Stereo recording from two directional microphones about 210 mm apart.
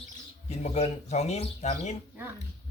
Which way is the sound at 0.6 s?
35° left (ahead or behind).